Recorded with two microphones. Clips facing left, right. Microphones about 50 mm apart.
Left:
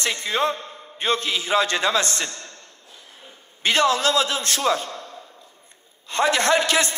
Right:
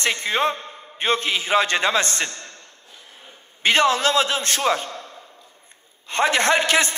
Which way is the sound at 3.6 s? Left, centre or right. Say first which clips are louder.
Right 1 dB; right.